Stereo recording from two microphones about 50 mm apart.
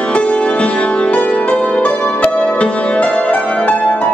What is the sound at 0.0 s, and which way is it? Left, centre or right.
Music, left.